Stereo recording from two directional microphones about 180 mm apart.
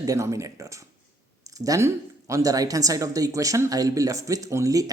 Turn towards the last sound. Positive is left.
turn(degrees=-20)  # may be behind; listen again after turning